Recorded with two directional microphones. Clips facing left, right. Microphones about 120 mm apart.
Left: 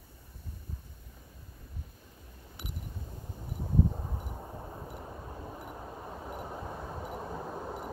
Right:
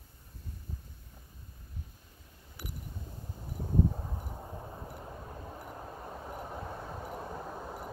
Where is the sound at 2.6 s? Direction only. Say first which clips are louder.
Even; 20° left (ahead or behind).